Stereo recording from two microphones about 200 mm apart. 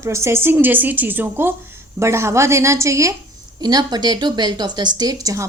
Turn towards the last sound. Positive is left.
turn(degrees=-15)  # may be behind; listen again after turning